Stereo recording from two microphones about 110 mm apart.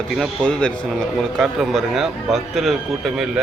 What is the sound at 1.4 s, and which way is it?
A man's voice, 5° right (ahead or behind).